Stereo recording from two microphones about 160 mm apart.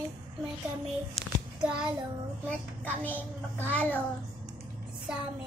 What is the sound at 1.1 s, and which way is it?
Child singing, 5° right (ahead or behind).